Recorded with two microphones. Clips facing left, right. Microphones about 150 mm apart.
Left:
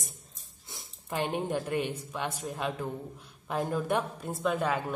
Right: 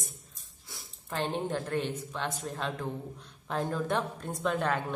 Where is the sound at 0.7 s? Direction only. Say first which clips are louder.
Left 2 dB; 20° left (ahead or behind).